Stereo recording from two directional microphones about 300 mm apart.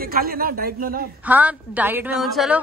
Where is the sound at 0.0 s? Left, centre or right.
Right.